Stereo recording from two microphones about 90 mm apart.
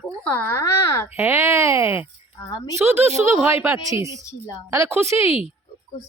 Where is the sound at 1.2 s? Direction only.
30° right (ahead or behind).